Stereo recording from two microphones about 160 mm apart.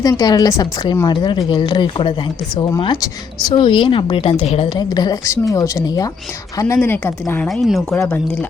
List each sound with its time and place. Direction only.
0.0 s a woman's voice: 25° left (ahead or behind)
6.7 s a woman's voice: 10° left (ahead or behind)
7.9 s speech: 10° left (ahead or behind)